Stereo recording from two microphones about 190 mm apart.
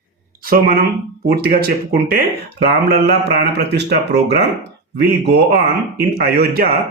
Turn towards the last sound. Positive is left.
turn(degrees=-55)  # may be behind; listen again after turning